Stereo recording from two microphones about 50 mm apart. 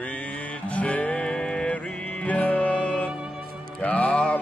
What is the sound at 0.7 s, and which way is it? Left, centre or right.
Music, left.